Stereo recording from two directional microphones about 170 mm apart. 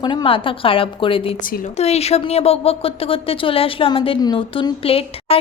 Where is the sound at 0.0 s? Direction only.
25° left (ahead or behind).